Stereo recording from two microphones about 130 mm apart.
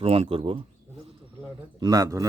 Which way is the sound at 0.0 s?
50° right (ahead or behind).